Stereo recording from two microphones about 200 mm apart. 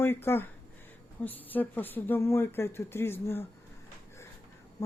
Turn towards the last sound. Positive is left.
turn(degrees=10)  # may be behind; listen again after turning